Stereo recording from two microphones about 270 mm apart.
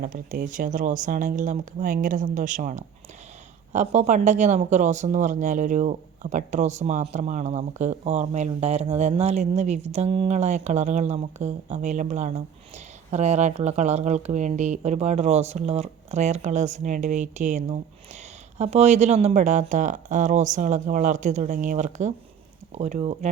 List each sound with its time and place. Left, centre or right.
0.0 s speech: right